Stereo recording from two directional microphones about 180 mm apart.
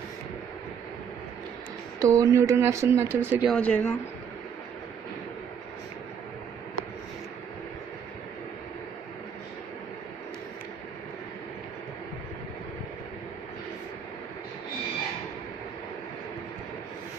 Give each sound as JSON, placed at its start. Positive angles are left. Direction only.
{"t": 2.0, "sound": "speech", "side_deg": -20}
{"t": 3.4, "sound": "speech", "side_deg": 5}